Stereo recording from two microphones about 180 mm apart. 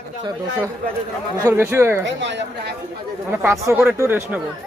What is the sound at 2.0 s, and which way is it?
Speech, 80° right.